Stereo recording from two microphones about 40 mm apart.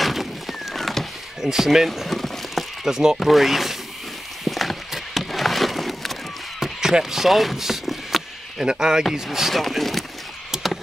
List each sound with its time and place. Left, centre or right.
0.0 s a sound: centre
1.4 s speech: centre
2.0 s a sound: centre
2.8 s speech: centre
3.2 s speech: centre
4.5 s a sound: centre
6.6 s chop: centre
8.6 s speech: centre
9.5 s speech: centre
10.5 s chop: centre